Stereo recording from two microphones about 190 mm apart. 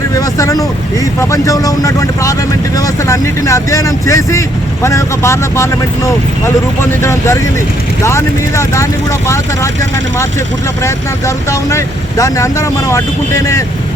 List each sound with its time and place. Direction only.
0.3 s speech: 15° left (ahead or behind)
7.0 s speech: 15° left (ahead or behind)
11.7 s speech: 15° left (ahead or behind)